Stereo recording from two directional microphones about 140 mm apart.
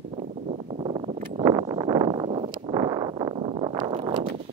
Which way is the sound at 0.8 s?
40° right (ahead or behind).